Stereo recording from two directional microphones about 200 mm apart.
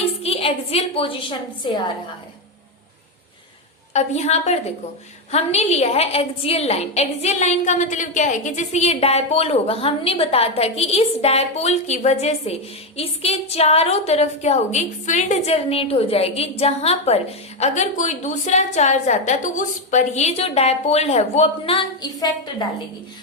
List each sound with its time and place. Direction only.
0.2 s a woman's voice: 30° left (ahead or behind)
3.9 s a woman's voice: 35° left (ahead or behind)